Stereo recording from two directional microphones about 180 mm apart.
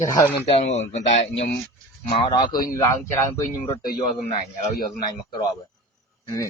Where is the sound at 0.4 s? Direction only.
35° left (ahead or behind).